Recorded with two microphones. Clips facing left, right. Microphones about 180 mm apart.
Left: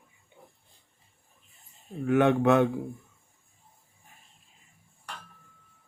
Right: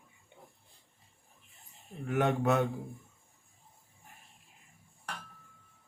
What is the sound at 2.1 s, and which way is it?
Speech, 70° left (ahead or behind).